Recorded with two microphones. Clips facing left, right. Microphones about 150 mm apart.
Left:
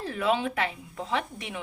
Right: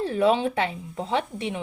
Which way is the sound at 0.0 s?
30° right (ahead or behind).